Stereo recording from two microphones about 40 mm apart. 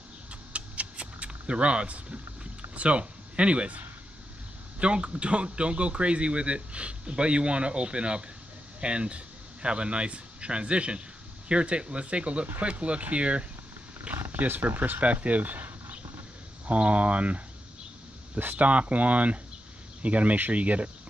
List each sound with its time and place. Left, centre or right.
0.3 s a sound: right
2.7 s speech: right
14.1 s wild animals: right
14.5 s speech: right
15.0 s speech: right
18.4 s speech: right